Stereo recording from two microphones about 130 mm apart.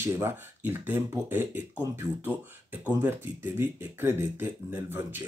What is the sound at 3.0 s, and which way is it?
Speech, 15° right (ahead or behind).